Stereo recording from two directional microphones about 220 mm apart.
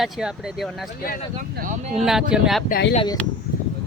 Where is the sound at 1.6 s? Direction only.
45° right (ahead or behind).